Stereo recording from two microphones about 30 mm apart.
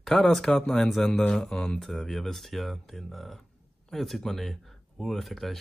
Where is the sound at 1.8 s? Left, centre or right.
Centre.